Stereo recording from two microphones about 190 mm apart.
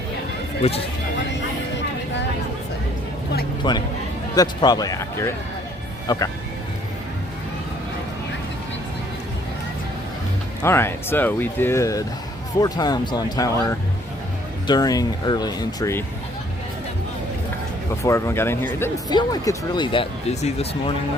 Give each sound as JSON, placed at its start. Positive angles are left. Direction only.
{"t": 0.6, "sound": "speech", "side_deg": 35}
{"t": 1.3, "sound": "vehicle", "side_deg": 70}
{"t": 3.6, "sound": "speech", "side_deg": 20}
{"t": 10.6, "sound": "speech", "side_deg": 15}
{"t": 18.0, "sound": "speech", "side_deg": 15}